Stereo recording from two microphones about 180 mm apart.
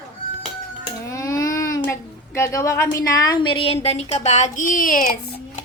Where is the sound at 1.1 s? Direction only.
15° left (ahead or behind).